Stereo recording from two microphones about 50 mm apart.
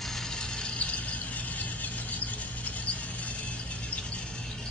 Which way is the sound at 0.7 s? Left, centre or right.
Left.